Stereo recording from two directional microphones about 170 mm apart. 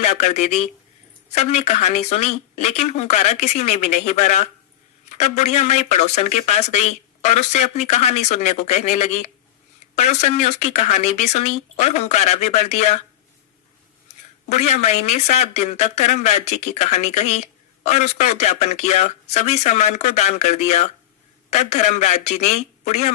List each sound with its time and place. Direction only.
0.0 s speech: 40° left (ahead or behind)
14.5 s speech: 40° left (ahead or behind)